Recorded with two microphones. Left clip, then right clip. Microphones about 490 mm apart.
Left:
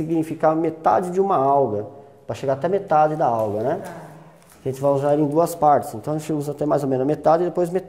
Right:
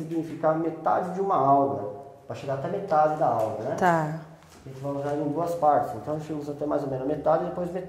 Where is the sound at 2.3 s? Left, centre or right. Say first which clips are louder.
Left 7 dB; left.